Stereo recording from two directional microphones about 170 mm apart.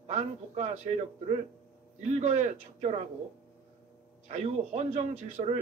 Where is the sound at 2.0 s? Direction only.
45° right (ahead or behind).